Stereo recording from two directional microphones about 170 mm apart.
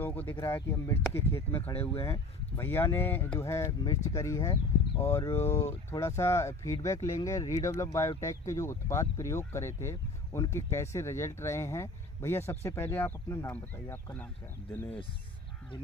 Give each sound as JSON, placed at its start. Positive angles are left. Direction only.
{"t": 0.0, "sound": "speech", "side_deg": 10}